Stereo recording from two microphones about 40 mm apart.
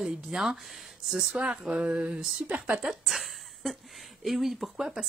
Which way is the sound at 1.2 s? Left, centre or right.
Right.